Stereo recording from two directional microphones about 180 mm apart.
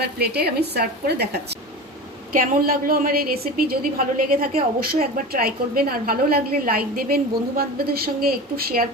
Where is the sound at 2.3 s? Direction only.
55° right (ahead or behind).